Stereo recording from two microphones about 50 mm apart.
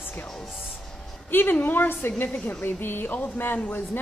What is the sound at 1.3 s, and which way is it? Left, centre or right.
Speech, left.